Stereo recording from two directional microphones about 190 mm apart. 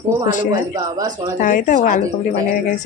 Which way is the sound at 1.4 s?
40° left (ahead or behind).